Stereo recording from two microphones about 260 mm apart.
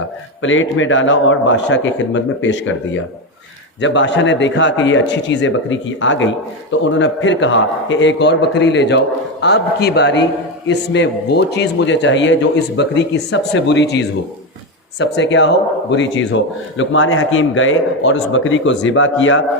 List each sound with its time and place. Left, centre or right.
0.4 s a man's voice: left